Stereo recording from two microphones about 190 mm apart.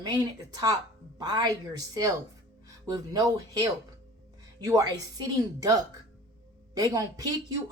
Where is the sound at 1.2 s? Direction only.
20° right (ahead or behind).